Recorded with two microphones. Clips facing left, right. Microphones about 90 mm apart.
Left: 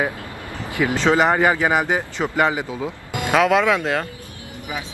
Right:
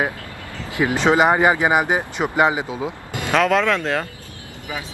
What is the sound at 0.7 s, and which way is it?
Speech, 20° right (ahead or behind).